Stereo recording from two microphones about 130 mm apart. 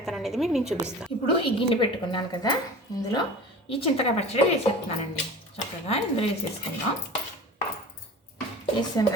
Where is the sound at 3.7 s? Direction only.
50° left (ahead or behind).